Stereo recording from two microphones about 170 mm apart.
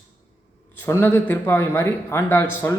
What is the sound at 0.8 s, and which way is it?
A man's voice, 15° left (ahead or behind).